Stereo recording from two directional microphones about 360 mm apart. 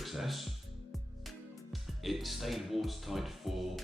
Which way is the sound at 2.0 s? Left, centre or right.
Centre.